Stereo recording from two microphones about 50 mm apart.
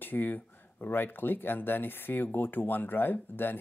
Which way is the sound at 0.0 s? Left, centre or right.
Left.